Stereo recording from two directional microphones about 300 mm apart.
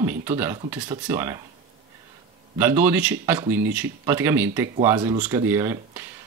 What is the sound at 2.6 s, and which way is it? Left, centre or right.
Speech, centre.